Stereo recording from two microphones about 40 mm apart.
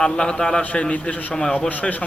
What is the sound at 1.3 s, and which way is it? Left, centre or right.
Speech, left.